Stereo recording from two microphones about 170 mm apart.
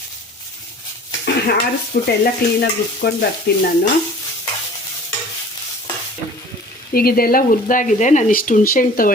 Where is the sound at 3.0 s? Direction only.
75° left (ahead or behind).